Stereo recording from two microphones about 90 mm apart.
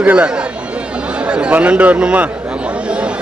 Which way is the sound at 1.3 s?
15° right (ahead or behind).